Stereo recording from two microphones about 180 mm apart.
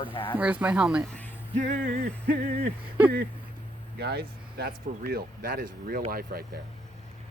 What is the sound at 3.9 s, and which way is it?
Speech, 65° right (ahead or behind).